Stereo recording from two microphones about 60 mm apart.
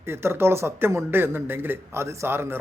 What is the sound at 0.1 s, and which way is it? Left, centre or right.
Speech, right.